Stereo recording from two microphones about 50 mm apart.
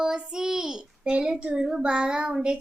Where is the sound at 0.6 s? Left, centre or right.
Centre.